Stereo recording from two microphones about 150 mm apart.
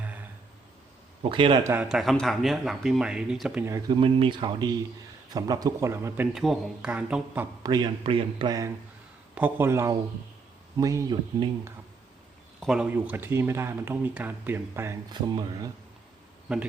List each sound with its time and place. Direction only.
1.2 s a man's voice: 35° right (ahead or behind)
1.6 s speech: 15° right (ahead or behind)
1.9 s speech: centre (ahead or behind)
3.6 s speech: 20° right (ahead or behind)
6.3 s speech: centre (ahead or behind)
7.6 s speech: 25° right (ahead or behind)
9.3 s speech: 15° right (ahead or behind); by 11.5 s 30° right (ahead or behind)
12.5 s speech: 5° right (ahead or behind)
15.1 s speech: 30° right (ahead or behind)
16.5 s speech: 5° right (ahead or behind)